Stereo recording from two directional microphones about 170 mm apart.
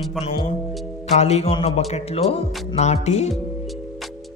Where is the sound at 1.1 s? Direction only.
40° left (ahead or behind).